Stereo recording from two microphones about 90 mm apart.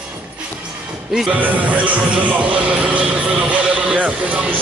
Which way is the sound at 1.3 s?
15° right (ahead or behind).